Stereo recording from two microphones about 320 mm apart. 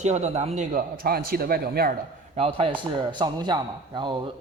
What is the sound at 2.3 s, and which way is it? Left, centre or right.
A man's voice, centre.